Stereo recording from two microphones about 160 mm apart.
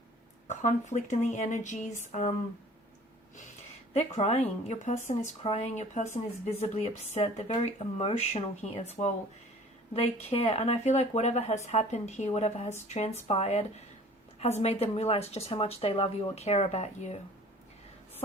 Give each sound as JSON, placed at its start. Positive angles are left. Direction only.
{"t": 0.4, "sound": "speech", "side_deg": 50}
{"t": 3.9, "sound": "speech", "side_deg": 40}
{"t": 5.4, "sound": "a woman's voice", "side_deg": 35}